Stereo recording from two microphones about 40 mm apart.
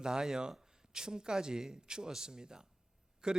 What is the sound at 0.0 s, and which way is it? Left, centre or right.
A man's voice, centre.